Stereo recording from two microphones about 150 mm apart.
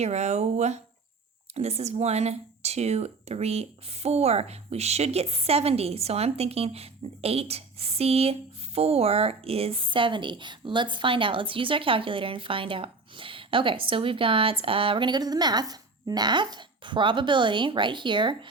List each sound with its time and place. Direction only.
0.0 s speech: 50° right (ahead or behind); by 18.3 s 30° right (ahead or behind)